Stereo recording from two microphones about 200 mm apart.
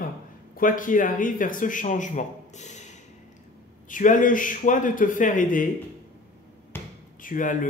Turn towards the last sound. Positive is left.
turn(degrees=40)  # may be behind; listen again after turning